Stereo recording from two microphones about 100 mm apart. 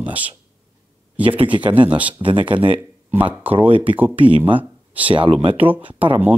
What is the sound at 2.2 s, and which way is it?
Speech, 60° right (ahead or behind).